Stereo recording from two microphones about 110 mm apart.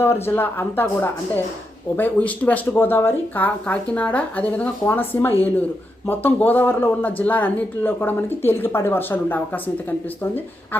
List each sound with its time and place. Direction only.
0.0 s speech: 20° left (ahead or behind)